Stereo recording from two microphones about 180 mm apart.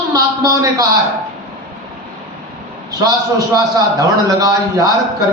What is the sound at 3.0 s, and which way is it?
A man's voice, 20° right (ahead or behind).